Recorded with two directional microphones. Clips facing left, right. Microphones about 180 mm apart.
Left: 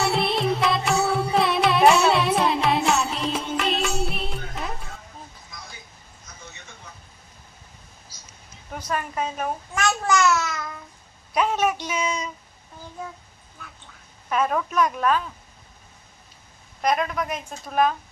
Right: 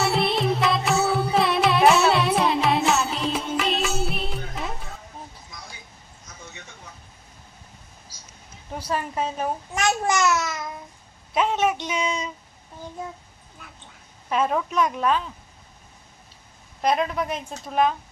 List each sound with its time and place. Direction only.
0.0 s music: centre (ahead or behind)
8.7 s babbling: 30° right (ahead or behind)
11.3 s a woman's voice: 20° right (ahead or behind)
14.3 s a woman's voice: 25° right (ahead or behind)
16.8 s a woman's voice: 25° right (ahead or behind)